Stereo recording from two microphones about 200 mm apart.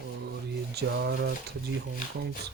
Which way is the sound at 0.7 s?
55° right (ahead or behind).